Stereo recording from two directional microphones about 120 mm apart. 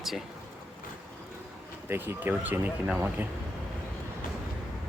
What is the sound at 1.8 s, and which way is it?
Speech, 20° right (ahead or behind).